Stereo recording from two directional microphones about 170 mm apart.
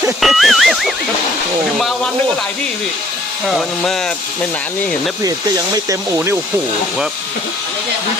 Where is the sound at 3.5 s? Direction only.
Centre (ahead or behind).